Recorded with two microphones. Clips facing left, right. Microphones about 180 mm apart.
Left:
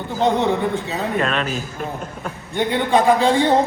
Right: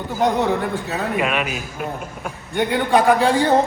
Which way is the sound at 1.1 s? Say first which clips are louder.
Left 1 dB; 10° right (ahead or behind).